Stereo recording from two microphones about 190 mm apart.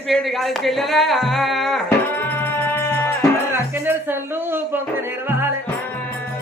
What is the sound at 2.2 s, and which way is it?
Music, 10° left (ahead or behind).